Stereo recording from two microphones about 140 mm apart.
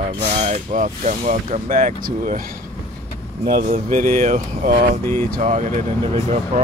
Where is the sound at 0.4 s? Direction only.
55° right (ahead or behind).